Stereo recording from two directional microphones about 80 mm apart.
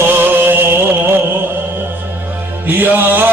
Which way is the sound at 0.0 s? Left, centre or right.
Right.